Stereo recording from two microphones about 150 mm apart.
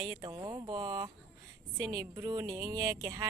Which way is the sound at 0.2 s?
25° right (ahead or behind).